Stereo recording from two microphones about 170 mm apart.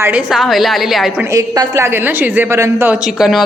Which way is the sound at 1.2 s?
20° right (ahead or behind).